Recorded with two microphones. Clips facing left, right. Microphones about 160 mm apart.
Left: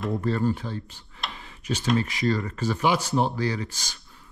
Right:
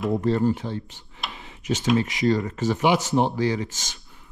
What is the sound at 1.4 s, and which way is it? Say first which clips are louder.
Tick-tock: right 5 dB; 20° right (ahead or behind).